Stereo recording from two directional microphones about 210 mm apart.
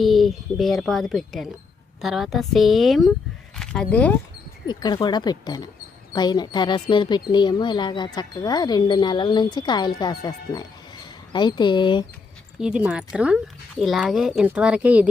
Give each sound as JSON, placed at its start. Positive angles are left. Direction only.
{"t": 0.0, "sound": "speech", "side_deg": 0}
{"t": 4.6, "sound": "speech", "side_deg": 20}
{"t": 12.5, "sound": "speech", "side_deg": -5}